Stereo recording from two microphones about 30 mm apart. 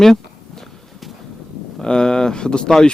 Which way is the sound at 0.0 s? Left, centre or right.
Centre.